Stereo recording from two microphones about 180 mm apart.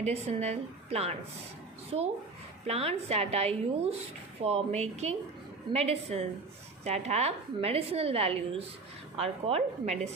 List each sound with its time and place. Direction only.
0.0 s a woman's voice: 35° right (ahead or behind)